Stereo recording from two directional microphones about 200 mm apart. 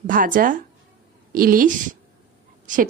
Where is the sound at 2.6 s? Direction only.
40° right (ahead or behind).